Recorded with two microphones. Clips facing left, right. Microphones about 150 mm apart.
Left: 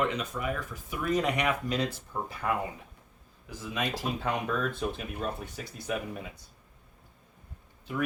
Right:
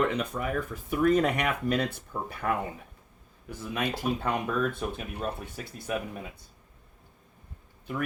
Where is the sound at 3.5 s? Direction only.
60° right (ahead or behind).